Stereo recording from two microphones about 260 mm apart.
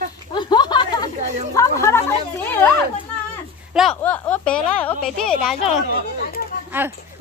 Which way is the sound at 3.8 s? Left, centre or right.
Centre.